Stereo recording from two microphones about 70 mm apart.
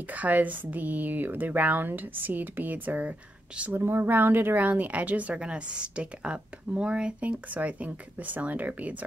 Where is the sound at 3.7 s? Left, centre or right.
Right.